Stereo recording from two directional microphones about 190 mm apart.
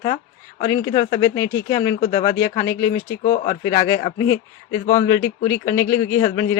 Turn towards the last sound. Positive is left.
turn(degrees=15)  # may be behind; listen again after turning